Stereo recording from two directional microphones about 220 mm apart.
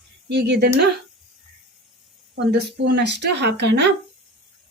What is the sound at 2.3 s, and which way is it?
A woman's voice, 50° right (ahead or behind).